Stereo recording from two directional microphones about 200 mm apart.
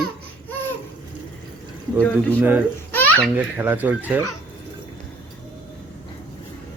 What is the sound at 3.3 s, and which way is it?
Speech, 10° right (ahead or behind).